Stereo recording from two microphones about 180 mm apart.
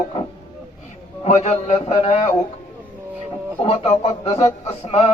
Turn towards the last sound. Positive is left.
turn(degrees=35)  # may be behind; listen again after turning